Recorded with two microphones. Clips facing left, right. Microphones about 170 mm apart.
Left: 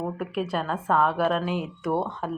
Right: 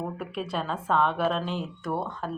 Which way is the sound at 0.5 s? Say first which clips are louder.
Left 1 dB; 5° left (ahead or behind).